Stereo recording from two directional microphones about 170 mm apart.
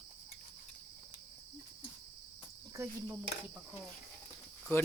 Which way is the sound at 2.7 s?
15° right (ahead or behind).